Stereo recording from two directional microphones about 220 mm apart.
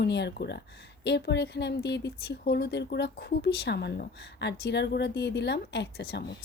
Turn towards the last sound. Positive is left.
turn(degrees=45)  # may be behind; listen again after turning